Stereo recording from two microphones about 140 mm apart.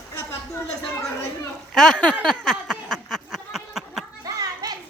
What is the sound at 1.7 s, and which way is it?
Speech, 5° left (ahead or behind).